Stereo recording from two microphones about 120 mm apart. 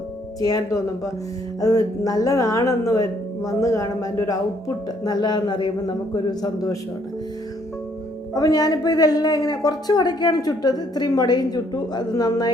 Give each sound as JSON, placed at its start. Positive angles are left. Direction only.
{"t": 0.3, "sound": "a man's voice", "side_deg": 30}
{"t": 8.4, "sound": "a man's voice", "side_deg": 30}